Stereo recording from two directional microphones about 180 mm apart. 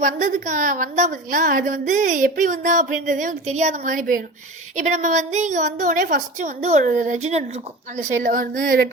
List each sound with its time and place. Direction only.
0.0 s a woman's voice: 45° right (ahead or behind)